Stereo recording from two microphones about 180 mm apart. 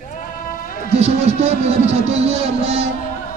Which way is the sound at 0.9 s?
35° right (ahead or behind).